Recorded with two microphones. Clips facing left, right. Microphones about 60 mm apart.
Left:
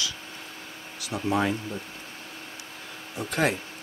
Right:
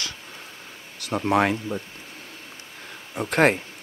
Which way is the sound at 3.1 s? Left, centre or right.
Right.